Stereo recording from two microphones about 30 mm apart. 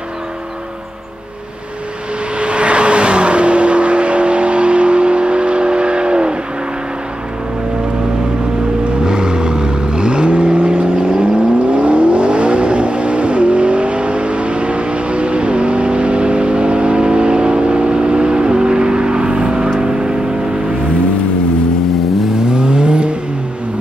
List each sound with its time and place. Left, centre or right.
2.3 s vehicle: right
9.0 s vehicle: right
22.5 s vehicle: right